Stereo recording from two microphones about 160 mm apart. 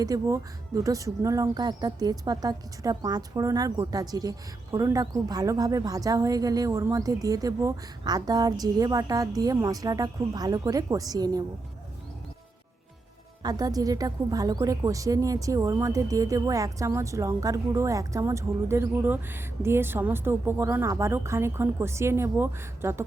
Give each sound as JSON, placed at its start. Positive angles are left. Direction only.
{"t": 0.0, "sound": "a woman's voice", "side_deg": -20}
{"t": 13.4, "sound": "a woman's voice", "side_deg": -25}